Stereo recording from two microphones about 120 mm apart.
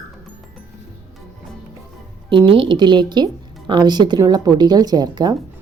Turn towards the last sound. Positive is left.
turn(degrees=-35)  # may be behind; listen again after turning